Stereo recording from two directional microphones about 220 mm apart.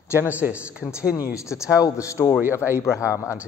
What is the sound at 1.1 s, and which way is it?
A man's voice, 15° left (ahead or behind).